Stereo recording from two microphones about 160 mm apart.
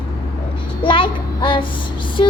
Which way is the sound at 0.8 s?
30° left (ahead or behind).